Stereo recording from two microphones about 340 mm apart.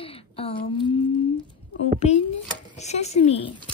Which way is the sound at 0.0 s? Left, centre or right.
Centre.